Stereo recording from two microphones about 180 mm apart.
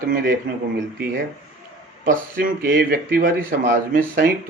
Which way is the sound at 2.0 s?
55° right (ahead or behind).